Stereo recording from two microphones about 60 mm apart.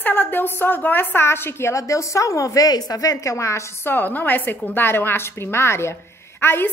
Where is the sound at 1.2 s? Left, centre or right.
Left.